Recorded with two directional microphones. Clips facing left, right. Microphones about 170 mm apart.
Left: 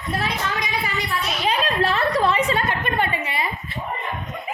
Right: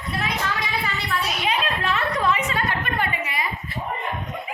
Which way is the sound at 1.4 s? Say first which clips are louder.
Left 6 dB; 35° left (ahead or behind).